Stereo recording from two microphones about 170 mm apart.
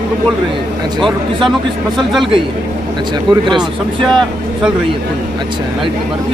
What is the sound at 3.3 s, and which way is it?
Speech, 25° right (ahead or behind).